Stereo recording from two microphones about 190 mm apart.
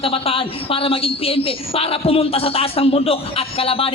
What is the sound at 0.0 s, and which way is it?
A woman's voice, 30° left (ahead or behind).